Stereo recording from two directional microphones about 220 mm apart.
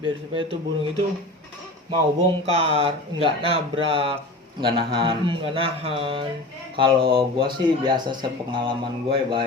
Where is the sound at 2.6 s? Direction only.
25° right (ahead or behind).